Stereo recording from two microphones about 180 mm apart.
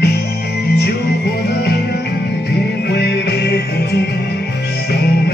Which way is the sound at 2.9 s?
65° left (ahead or behind).